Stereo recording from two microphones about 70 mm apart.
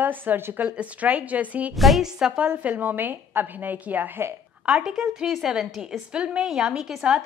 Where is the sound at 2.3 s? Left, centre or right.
Right.